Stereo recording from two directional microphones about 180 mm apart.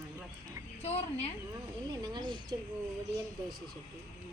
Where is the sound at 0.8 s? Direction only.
35° left (ahead or behind).